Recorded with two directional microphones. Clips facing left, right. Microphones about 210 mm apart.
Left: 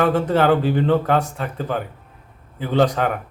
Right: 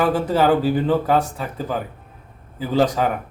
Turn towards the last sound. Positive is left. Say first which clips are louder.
# even
turn(degrees=-5)  # may be behind; listen again after turning